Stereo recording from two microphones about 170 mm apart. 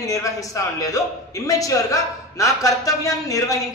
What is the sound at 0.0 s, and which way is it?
A man's voice, 20° left (ahead or behind).